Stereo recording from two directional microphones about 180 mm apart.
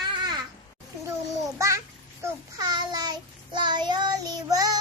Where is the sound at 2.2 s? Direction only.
25° right (ahead or behind).